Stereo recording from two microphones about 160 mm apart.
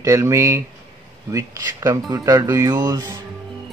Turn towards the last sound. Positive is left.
turn(degrees=-25)  # may be behind; listen again after turning